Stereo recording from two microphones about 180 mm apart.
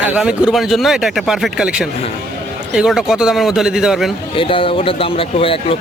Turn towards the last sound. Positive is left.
turn(degrees=30)  # may be behind; listen again after turning